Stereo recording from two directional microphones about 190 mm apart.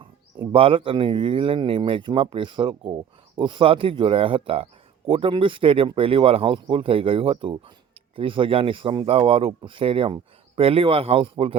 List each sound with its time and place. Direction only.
0.3 s speech: 30° right (ahead or behind)